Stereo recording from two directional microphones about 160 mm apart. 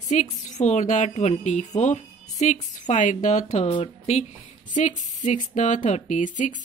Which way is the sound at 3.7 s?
30° left (ahead or behind).